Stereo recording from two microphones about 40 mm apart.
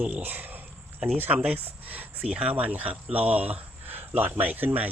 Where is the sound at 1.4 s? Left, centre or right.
Right.